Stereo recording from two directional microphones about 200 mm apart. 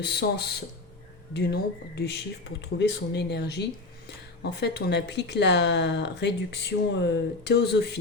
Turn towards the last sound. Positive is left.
turn(degrees=55)  # may be behind; listen again after turning